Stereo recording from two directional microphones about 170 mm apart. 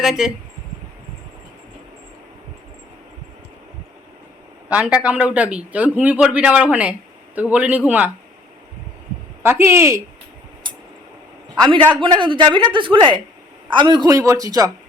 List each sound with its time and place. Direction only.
0.0 s speech: 5° right (ahead or behind)
4.7 s a man's voice: 5° right (ahead or behind)
9.4 s a man's voice: 15° right (ahead or behind)
11.9 s speech: 30° right (ahead or behind)